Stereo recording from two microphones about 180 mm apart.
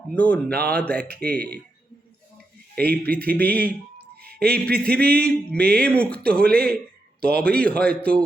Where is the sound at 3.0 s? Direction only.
10° left (ahead or behind).